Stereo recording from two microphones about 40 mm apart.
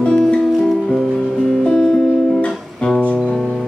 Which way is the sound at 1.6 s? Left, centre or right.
Centre.